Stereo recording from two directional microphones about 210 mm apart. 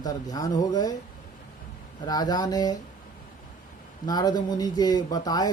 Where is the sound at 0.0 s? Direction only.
20° left (ahead or behind).